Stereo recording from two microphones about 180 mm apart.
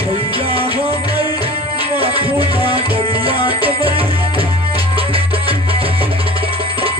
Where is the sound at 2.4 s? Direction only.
30° right (ahead or behind).